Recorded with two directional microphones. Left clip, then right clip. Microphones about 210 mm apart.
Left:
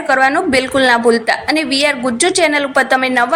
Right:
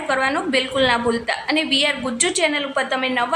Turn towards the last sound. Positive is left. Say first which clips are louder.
# left 8 dB
turn(degrees=30)  # may be behind; listen again after turning